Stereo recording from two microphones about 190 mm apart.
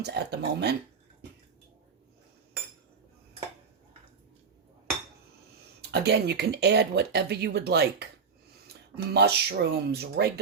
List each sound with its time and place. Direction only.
0.0 s speech: 60° right (ahead or behind)
5.9 s speech: 60° right (ahead or behind)
9.1 s speech: 60° right (ahead or behind)